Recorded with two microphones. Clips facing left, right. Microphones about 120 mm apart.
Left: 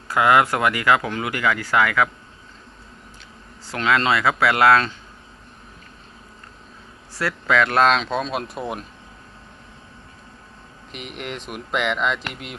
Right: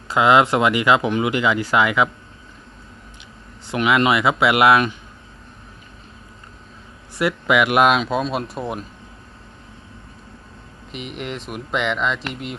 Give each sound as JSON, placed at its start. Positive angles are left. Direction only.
{"t": 0.1, "sound": "speech", "side_deg": -20}
{"t": 3.7, "sound": "speech", "side_deg": -15}
{"t": 7.2, "sound": "speech", "side_deg": -15}
{"t": 10.9, "sound": "speech", "side_deg": 0}